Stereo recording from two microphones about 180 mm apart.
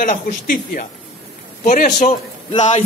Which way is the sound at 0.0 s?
50° left (ahead or behind).